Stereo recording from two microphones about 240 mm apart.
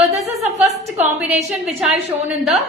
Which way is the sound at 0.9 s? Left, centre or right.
Right.